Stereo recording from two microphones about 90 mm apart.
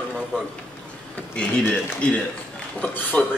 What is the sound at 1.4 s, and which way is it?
Speech, 10° left (ahead or behind).